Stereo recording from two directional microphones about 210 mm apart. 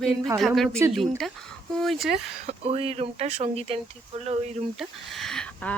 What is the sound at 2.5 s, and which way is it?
Speech, 30° right (ahead or behind).